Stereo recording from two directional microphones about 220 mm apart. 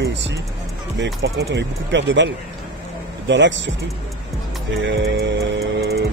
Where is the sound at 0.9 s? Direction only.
55° right (ahead or behind).